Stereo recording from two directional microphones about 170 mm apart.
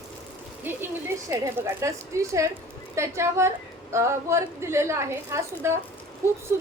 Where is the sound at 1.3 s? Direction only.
15° right (ahead or behind).